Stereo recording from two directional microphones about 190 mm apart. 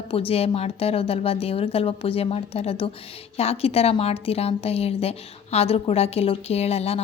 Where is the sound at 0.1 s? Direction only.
30° left (ahead or behind).